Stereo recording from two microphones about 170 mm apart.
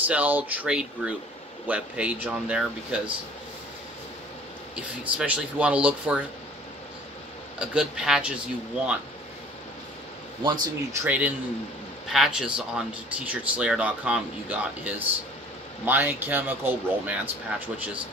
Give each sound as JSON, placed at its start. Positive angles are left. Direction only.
{"t": 0.0, "sound": "speech", "side_deg": -10}
{"t": 5.1, "sound": "speech", "side_deg": -10}
{"t": 7.5, "sound": "speech", "side_deg": -5}
{"t": 10.4, "sound": "speech", "side_deg": -25}